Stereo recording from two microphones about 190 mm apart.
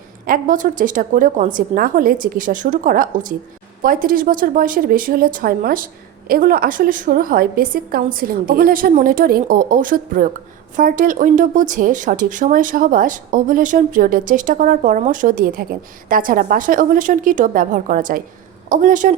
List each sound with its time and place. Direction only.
0.3 s speech: 45° right (ahead or behind)